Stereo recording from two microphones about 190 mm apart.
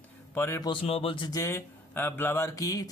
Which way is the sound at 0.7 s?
30° left (ahead or behind).